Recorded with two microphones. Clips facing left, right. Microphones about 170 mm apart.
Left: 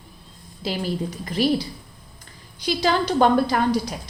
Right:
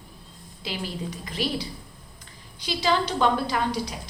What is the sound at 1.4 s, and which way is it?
Speech, 40° left (ahead or behind).